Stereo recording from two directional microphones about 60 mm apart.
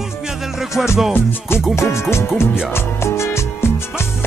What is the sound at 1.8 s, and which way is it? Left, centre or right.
Music, left.